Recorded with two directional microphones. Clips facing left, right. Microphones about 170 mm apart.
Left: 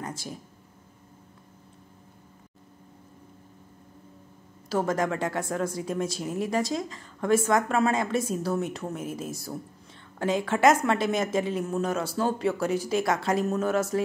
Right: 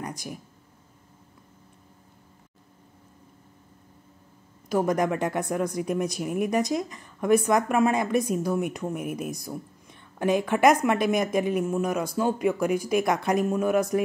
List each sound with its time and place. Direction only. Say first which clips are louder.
0.0 s a woman's voice: right 1 dB; 15° right (ahead or behind)
4.6 s a woman's voice: right 2 dB; 15° right (ahead or behind)